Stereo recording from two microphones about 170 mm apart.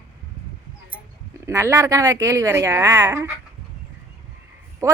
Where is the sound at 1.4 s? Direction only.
15° right (ahead or behind).